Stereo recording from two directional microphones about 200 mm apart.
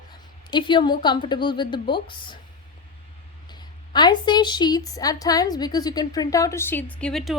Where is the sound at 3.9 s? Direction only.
20° left (ahead or behind).